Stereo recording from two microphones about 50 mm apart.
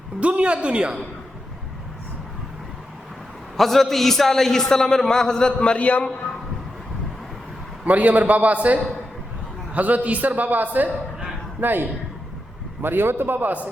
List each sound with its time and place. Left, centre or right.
0.2 s a man's voice: right
3.6 s a man's voice: centre; by 6.1 s left
7.9 s a man's voice: right